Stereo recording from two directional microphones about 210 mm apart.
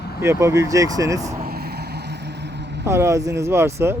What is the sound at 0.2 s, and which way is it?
Speech, 15° right (ahead or behind).